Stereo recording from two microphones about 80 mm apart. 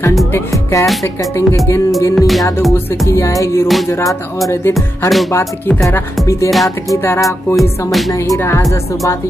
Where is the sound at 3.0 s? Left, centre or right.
Left.